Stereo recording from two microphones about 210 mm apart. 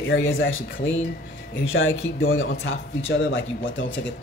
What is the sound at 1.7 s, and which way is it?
A man's voice, 70° left (ahead or behind).